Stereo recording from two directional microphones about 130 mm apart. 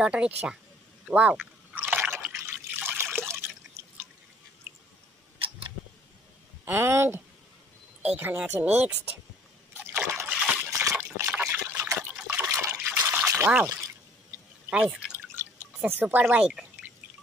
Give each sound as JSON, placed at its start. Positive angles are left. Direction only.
{"t": 0.0, "sound": "speech", "side_deg": -5}
{"t": 1.0, "sound": "a sound", "side_deg": -5}
{"t": 2.4, "sound": "drip", "side_deg": -15}
{"t": 6.6, "sound": "speech", "side_deg": -20}
{"t": 9.8, "sound": "liquid", "side_deg": -15}
{"t": 10.7, "sound": "liquid", "side_deg": -25}
{"t": 12.8, "sound": "trickle", "side_deg": -15}
{"t": 14.7, "sound": "drip", "side_deg": -10}